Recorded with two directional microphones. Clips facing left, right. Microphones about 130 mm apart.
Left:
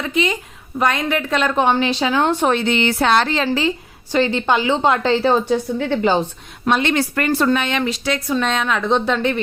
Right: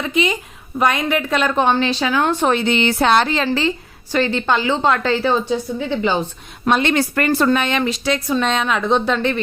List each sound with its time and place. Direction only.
0.0 s a woman's voice: 15° right (ahead or behind); by 2.5 s 20° left (ahead or behind)
2.6 s a woman's voice: 25° right (ahead or behind)
3.2 s a woman's voice: 5° right (ahead or behind)
3.4 s speech: 10° left (ahead or behind)
4.1 s a woman's voice: 20° left (ahead or behind)
5.5 s a woman's voice: 60° left (ahead or behind)
6.7 s a woman's voice: 45° right (ahead or behind); by 8.8 s 20° right (ahead or behind)
8.9 s a woman's voice: 5° right (ahead or behind)